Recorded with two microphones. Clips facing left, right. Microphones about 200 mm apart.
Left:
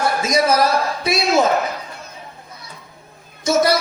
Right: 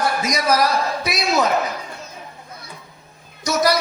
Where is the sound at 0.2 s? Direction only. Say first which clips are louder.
Left 5 dB; 25° left (ahead or behind).